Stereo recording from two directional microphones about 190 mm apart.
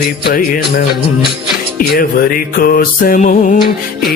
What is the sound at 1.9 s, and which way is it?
Music, 50° left (ahead or behind).